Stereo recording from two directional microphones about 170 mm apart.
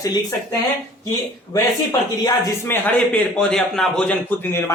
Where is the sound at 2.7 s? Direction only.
10° left (ahead or behind).